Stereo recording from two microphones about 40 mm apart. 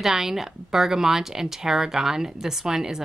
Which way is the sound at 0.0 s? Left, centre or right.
Centre.